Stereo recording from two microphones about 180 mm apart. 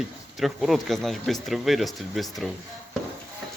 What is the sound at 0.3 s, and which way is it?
Speech, centre (ahead or behind).